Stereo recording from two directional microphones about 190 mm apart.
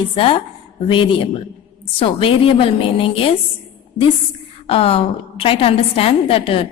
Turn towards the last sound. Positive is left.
turn(degrees=30)  # may be behind; listen again after turning